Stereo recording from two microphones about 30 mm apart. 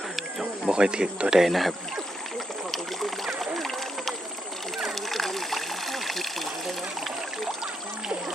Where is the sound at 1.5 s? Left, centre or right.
Centre.